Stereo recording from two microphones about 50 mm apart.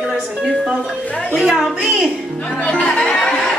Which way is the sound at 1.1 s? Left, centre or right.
Left.